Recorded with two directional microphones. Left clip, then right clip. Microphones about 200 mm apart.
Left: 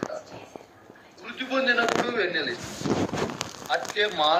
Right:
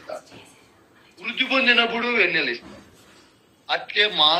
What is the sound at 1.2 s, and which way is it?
A man's voice, 50° right (ahead or behind).